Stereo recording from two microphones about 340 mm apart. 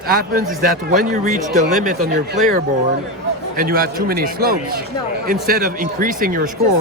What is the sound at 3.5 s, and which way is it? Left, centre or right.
Speech, right.